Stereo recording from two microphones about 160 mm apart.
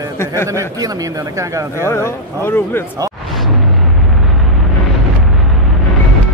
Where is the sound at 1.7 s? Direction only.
15° left (ahead or behind).